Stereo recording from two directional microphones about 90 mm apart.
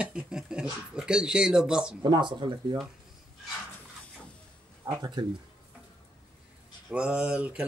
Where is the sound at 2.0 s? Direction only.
55° right (ahead or behind).